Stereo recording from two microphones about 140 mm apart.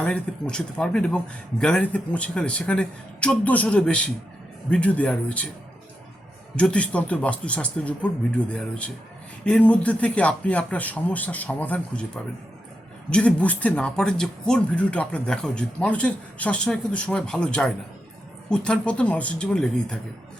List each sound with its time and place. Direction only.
0.0 s speech: 10° left (ahead or behind)
6.6 s speech: 10° left (ahead or behind)